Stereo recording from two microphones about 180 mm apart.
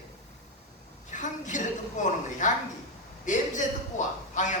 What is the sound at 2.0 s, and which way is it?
A man's voice, 45° left (ahead or behind).